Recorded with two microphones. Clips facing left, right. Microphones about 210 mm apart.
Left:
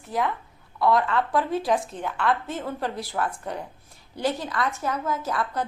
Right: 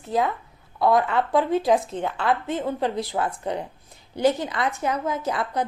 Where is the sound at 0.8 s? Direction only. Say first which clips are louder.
Right 2 dB; 20° right (ahead or behind).